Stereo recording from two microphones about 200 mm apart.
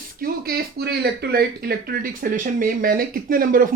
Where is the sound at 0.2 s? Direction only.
50° right (ahead or behind).